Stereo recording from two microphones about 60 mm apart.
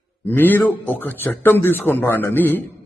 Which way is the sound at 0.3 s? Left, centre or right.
Left.